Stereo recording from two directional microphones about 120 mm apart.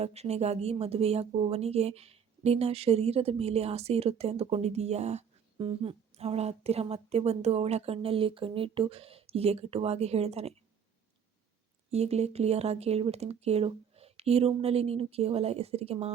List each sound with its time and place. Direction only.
0.0 s speech: 60° right (ahead or behind)
11.9 s speech: 60° right (ahead or behind)